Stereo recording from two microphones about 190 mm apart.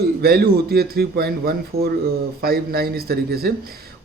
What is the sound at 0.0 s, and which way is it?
A man's voice, 55° right (ahead or behind).